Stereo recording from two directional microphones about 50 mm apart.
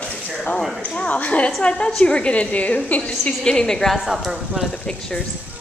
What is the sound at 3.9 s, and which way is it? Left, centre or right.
Speech, centre.